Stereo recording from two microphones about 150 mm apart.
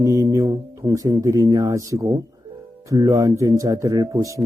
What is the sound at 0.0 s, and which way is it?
Speech, 20° right (ahead or behind).